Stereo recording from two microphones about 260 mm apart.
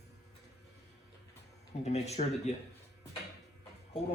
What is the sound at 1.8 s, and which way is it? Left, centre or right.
Speech, left.